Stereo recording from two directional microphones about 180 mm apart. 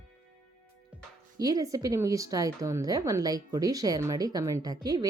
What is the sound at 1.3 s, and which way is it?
Speech, 20° right (ahead or behind).